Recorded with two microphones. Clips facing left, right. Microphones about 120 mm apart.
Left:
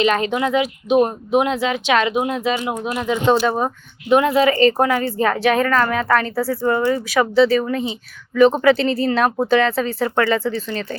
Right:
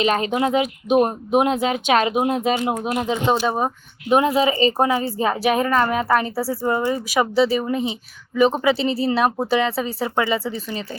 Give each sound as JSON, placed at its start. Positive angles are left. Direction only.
{"t": 0.0, "sound": "speech", "side_deg": -35}
{"t": 2.9, "sound": "speech", "side_deg": -30}
{"t": 3.2, "sound": "a woman's voice", "side_deg": -10}
{"t": 6.7, "sound": "speech", "side_deg": -20}
{"t": 7.3, "sound": "a woman's voice", "side_deg": -10}